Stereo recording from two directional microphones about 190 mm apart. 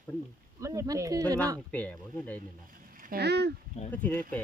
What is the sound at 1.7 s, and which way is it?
Speech, 10° left (ahead or behind).